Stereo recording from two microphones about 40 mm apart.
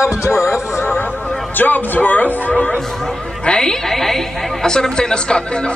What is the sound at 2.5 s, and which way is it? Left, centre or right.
Speech, centre.